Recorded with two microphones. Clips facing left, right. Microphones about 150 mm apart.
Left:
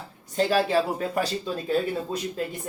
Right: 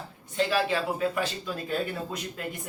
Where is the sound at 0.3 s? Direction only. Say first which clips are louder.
Left 4 dB; 40° left (ahead or behind).